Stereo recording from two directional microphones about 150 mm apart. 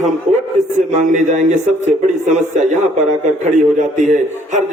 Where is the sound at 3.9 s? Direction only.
55° right (ahead or behind).